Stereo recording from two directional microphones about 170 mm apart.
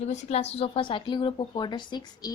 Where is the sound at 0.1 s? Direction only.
35° left (ahead or behind).